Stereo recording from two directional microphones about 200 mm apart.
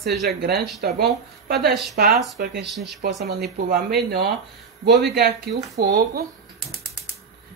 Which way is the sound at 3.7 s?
55° right (ahead or behind).